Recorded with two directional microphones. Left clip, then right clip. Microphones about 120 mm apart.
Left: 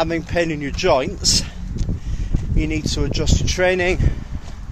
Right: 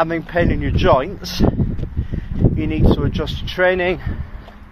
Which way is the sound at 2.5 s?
10° left (ahead or behind).